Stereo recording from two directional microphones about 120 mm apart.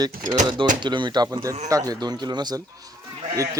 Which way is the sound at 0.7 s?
40° right (ahead or behind).